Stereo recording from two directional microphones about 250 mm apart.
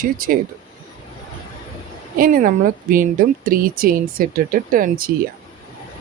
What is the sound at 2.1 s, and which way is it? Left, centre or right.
Speech, right.